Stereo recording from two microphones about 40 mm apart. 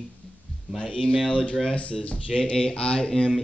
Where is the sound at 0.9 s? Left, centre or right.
Left.